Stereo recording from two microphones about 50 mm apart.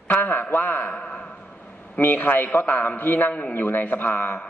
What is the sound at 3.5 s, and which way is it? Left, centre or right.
Speech, left.